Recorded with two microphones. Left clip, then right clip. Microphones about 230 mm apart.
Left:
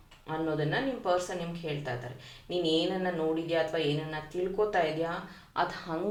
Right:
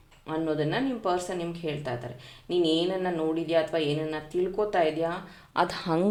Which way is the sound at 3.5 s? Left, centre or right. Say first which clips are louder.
Right 3 dB; right.